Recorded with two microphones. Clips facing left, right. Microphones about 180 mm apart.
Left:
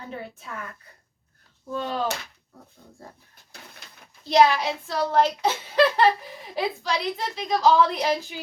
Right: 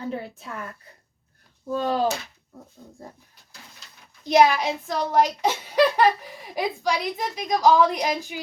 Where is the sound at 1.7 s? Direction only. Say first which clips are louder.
Right 5 dB; 35° right (ahead or behind).